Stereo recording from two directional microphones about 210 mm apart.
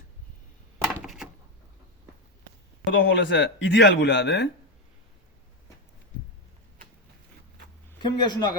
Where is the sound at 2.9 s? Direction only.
60° left (ahead or behind).